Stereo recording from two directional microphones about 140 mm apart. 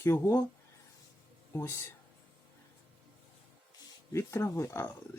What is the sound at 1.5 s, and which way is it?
Speech, 20° left (ahead or behind).